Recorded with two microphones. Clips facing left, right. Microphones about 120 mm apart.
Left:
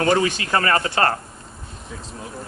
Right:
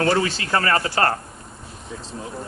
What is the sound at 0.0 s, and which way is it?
Speech, 20° left (ahead or behind).